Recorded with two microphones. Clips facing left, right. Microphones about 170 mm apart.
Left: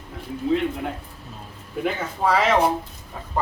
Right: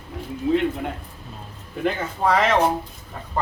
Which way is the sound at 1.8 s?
5° left (ahead or behind).